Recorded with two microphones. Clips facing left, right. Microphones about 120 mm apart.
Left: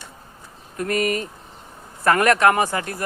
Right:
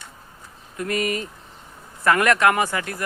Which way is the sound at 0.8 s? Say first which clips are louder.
Left 2 dB; 45° left (ahead or behind).